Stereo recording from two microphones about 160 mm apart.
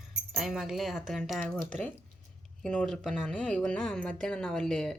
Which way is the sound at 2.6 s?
5° left (ahead or behind).